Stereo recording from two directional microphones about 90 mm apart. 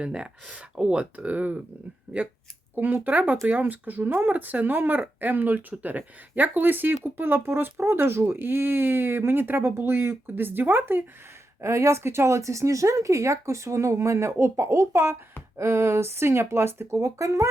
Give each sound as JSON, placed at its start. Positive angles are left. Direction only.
{"t": 0.0, "sound": "speech", "side_deg": -10}
{"t": 2.1, "sound": "speech", "side_deg": -30}